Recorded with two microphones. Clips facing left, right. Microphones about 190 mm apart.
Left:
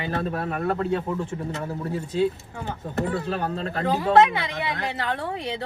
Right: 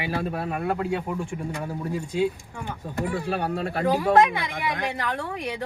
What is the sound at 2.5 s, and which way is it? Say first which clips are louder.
Speech: left 2 dB; 20° left (ahead or behind).